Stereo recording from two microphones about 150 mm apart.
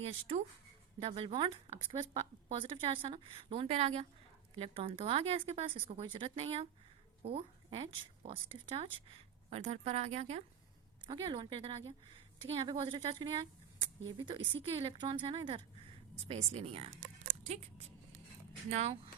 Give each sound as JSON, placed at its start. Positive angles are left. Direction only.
{"t": 0.0, "sound": "speech", "side_deg": -40}
{"t": 11.0, "sound": "speech", "side_deg": -30}
{"t": 17.4, "sound": "a sound", "side_deg": -45}
{"t": 18.7, "sound": "speech", "side_deg": -45}